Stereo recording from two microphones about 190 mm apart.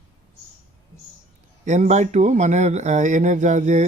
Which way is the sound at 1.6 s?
40° right (ahead or behind).